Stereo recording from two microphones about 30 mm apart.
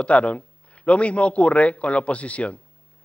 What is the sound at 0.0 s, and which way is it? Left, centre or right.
Speech, left.